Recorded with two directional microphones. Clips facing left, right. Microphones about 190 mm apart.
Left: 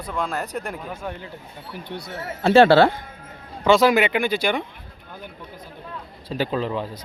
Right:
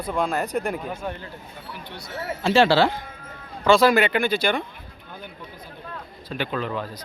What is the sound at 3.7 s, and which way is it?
Speech, 20° left (ahead or behind).